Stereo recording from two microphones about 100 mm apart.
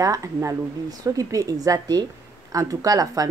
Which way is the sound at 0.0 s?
35° right (ahead or behind).